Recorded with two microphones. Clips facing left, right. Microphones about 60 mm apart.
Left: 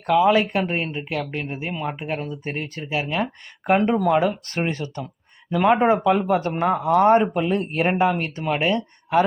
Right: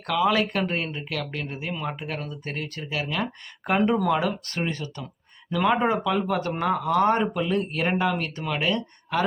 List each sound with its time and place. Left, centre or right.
0.1 s speech: centre
3.8 s speech: centre
4.1 s speech: left